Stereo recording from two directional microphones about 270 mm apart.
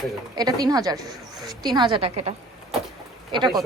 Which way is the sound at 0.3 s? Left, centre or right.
Centre.